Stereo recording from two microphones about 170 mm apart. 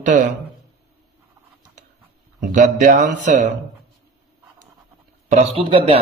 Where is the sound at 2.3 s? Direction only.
45° right (ahead or behind).